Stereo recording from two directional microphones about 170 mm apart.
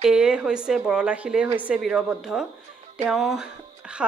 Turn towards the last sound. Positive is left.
turn(degrees=-5)  # may be behind; listen again after turning